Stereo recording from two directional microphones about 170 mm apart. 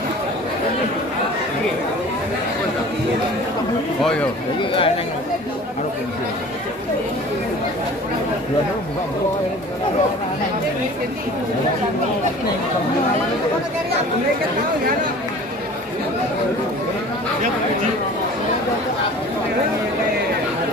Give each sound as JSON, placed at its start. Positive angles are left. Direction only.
{"t": 4.0, "sound": "speech", "side_deg": 5}
{"t": 4.6, "sound": "speech", "side_deg": 30}